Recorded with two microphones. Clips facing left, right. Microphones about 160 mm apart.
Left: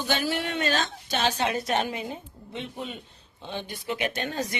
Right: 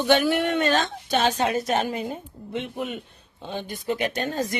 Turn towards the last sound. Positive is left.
turn(degrees=-45)  # may be behind; listen again after turning